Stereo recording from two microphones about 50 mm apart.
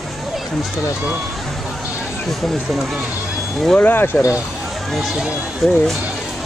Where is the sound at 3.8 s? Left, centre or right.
Left.